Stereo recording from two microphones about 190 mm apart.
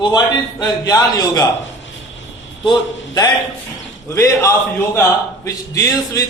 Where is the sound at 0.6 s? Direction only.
20° left (ahead or behind).